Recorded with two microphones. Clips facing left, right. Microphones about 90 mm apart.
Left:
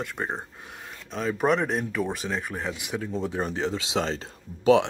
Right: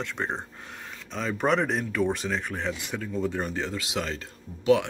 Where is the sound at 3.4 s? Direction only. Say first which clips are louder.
Left 3 dB; 20° left (ahead or behind).